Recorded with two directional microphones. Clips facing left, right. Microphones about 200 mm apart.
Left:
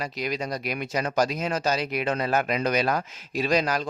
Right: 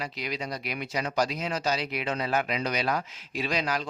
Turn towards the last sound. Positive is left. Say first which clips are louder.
# left 5 dB
turn(degrees=45)  # may be behind; listen again after turning